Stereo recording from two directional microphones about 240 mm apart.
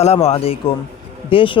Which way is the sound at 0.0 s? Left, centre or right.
Left.